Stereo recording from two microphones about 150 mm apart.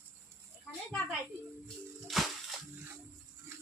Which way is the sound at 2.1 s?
Centre (ahead or behind).